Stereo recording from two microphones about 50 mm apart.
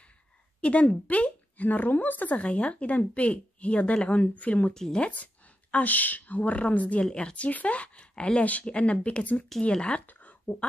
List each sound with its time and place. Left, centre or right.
0.6 s speech: left
2.3 s speech: left
4.7 s speech: centre
5.0 s speech: left
7.1 s speech: centre